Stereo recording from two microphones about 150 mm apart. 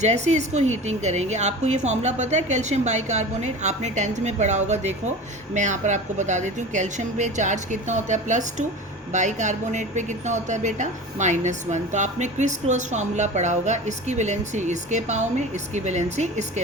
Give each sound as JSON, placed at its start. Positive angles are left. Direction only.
{"t": 0.0, "sound": "a woman's voice", "side_deg": -50}